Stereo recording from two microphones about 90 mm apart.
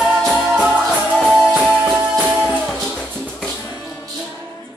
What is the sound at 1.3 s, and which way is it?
Music, 5° right (ahead or behind).